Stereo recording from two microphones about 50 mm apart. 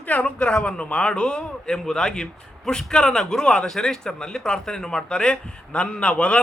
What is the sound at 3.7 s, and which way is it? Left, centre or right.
Speech, centre.